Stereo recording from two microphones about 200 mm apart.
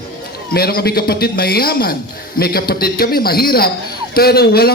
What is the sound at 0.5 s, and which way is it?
A man's voice, 50° left (ahead or behind).